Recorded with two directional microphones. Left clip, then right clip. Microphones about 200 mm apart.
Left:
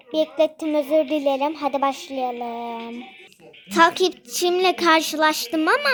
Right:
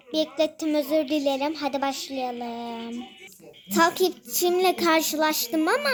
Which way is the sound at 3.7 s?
5° left (ahead or behind).